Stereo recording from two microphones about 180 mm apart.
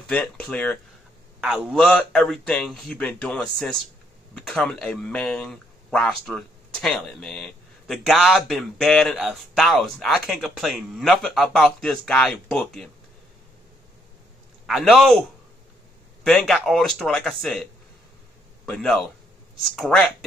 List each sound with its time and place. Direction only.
0.1 s speech: 5° left (ahead or behind)
14.7 s speech: centre (ahead or behind)
16.3 s speech: centre (ahead or behind)
18.7 s speech: 5° left (ahead or behind)